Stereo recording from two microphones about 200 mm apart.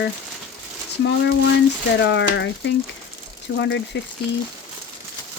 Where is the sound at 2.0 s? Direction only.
60° left (ahead or behind).